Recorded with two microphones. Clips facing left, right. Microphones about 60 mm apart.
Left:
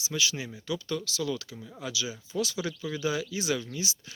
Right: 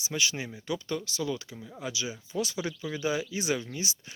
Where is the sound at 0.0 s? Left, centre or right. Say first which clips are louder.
Even; right.